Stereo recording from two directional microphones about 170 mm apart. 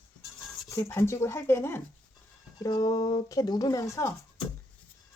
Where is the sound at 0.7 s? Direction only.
15° left (ahead or behind).